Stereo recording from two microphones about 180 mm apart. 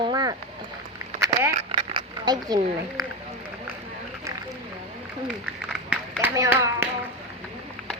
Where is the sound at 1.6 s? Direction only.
30° right (ahead or behind).